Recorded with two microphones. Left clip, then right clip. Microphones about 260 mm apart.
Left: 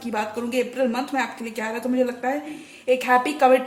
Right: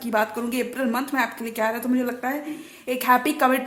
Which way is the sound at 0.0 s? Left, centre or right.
Right.